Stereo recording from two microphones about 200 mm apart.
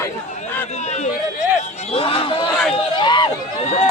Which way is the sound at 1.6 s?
30° left (ahead or behind).